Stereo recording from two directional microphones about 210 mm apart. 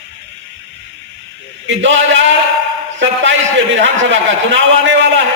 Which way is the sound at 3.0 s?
60° right (ahead or behind).